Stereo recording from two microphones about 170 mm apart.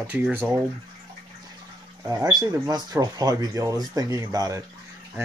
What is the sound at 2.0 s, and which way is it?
Speech, 15° right (ahead or behind).